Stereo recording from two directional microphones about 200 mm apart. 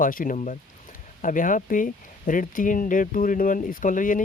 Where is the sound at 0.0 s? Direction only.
45° left (ahead or behind).